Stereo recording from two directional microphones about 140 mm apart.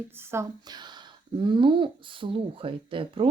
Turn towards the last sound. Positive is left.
turn(degrees=-40)  # may be behind; listen again after turning